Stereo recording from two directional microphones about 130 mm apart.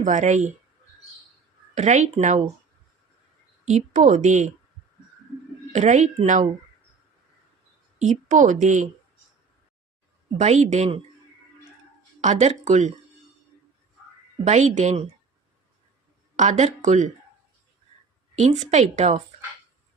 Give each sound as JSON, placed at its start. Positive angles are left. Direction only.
{"t": 0.0, "sound": "a woman's voice", "side_deg": -70}
{"t": 1.7, "sound": "a woman's voice", "side_deg": -65}
{"t": 3.7, "sound": "a woman's voice", "side_deg": -70}
{"t": 5.7, "sound": "a woman's voice", "side_deg": -65}
{"t": 7.9, "sound": "a woman's voice", "side_deg": -70}
{"t": 10.4, "sound": "a woman's voice", "side_deg": -60}
{"t": 12.2, "sound": "a woman's voice", "side_deg": -65}
{"t": 14.4, "sound": "a woman's voice", "side_deg": -65}
{"t": 16.4, "sound": "a woman's voice", "side_deg": -65}
{"t": 18.3, "sound": "a woman's voice", "side_deg": -65}